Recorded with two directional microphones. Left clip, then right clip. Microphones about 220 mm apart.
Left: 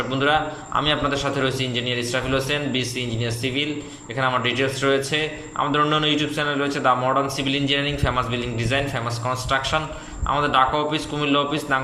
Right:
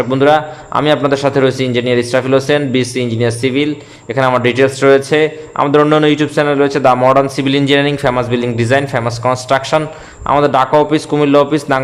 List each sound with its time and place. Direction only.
0.1 s a man's voice: 30° right (ahead or behind)